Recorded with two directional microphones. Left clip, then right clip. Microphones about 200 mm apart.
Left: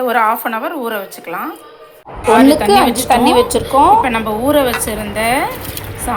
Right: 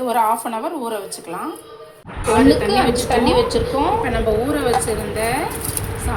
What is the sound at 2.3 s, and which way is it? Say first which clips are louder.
A woman's voice: left 5 dB; 30° left (ahead or behind).